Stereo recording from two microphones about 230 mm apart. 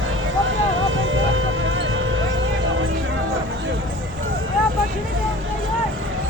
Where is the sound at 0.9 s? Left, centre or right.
Right.